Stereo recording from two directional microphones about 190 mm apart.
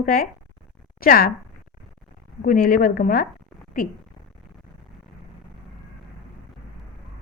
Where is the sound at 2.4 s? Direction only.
45° left (ahead or behind).